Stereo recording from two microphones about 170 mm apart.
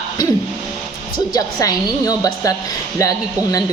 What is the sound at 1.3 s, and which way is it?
Speech, 20° left (ahead or behind).